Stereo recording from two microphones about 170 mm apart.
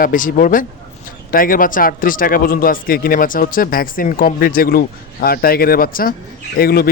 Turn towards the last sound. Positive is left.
turn(degrees=65)  # may be behind; listen again after turning